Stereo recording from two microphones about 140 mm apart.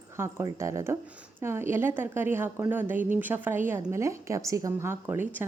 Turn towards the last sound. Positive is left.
turn(degrees=-15)  # may be behind; listen again after turning